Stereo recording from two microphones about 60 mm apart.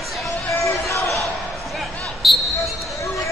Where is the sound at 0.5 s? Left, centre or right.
Left.